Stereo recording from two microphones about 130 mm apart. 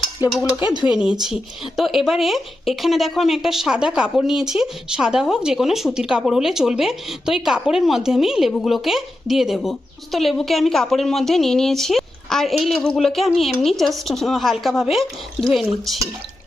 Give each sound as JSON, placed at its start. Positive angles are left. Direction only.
{"t": 0.2, "sound": "dishes", "side_deg": -15}
{"t": 0.9, "sound": "a woman's voice", "side_deg": -5}